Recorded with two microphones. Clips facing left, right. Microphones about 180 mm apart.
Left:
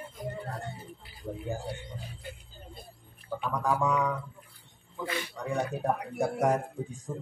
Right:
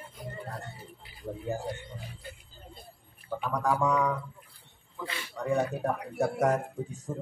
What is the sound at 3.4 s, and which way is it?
Speech, centre (ahead or behind).